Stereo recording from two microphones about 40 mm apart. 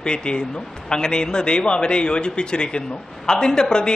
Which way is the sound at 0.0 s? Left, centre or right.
Left.